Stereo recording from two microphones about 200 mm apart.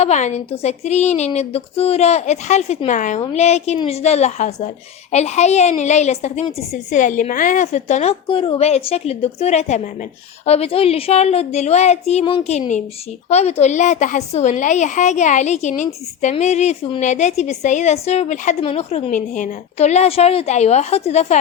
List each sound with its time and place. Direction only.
0.0 s a woman's voice: 35° left (ahead or behind)